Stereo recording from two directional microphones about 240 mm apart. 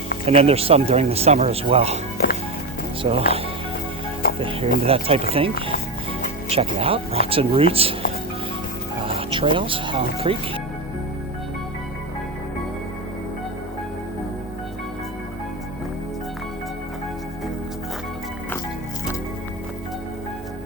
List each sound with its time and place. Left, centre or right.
0.3 s speech: right
3.0 s speech: right
4.2 s music: left
4.8 s speech: right
9.0 s speech: right